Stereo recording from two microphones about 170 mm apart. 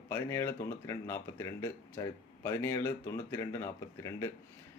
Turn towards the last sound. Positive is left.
turn(degrees=15)  # may be behind; listen again after turning